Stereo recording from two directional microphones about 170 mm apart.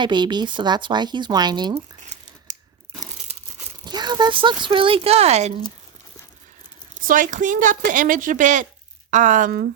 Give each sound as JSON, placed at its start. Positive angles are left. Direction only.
{"t": 0.0, "sound": "speech", "side_deg": -25}
{"t": 3.8, "sound": "speech", "side_deg": -25}
{"t": 6.9, "sound": "a woman's voice", "side_deg": -50}